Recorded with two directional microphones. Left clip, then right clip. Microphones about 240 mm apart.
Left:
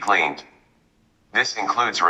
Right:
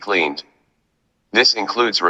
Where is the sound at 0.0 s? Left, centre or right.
Right.